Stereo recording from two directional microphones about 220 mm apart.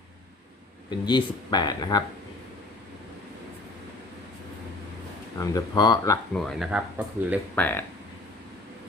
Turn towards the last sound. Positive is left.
turn(degrees=10)  # may be behind; listen again after turning